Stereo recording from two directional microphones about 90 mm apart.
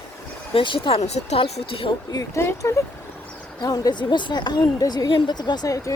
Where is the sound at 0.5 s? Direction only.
75° left (ahead or behind); by 1.9 s 90° left.